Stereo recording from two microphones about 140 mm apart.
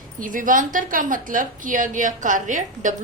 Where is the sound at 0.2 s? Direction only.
75° right (ahead or behind).